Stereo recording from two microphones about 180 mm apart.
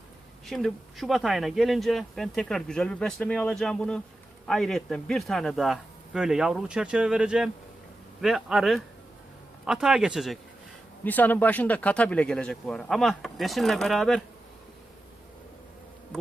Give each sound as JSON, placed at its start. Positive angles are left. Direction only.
{"t": 0.4, "sound": "speech", "side_deg": 0}
{"t": 11.0, "sound": "speech", "side_deg": 10}